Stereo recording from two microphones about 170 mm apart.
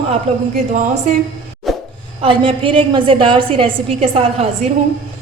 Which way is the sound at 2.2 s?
30° right (ahead or behind).